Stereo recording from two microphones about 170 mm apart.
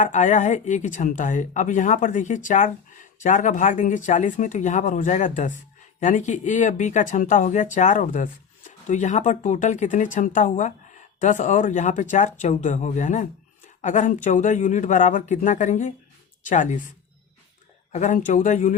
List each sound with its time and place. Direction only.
0.0 s speech: 45° left (ahead or behind)
17.9 s speech: 45° left (ahead or behind)